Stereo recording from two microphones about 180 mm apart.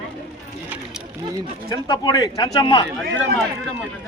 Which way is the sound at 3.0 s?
10° left (ahead or behind).